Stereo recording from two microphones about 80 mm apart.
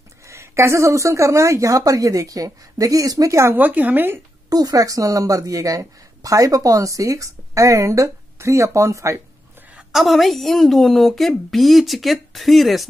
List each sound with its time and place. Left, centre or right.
0.2 s a woman's voice: right
3.5 s a woman's voice: right
4.5 s a woman's voice: right
9.9 s a woman's voice: centre